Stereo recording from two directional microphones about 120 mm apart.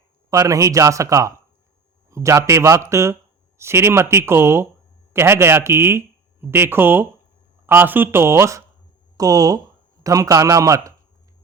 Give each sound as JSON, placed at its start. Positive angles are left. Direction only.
{"t": 0.3, "sound": "speech", "side_deg": -30}